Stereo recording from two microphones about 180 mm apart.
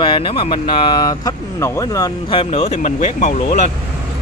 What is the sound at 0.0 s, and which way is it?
Speech, 30° left (ahead or behind).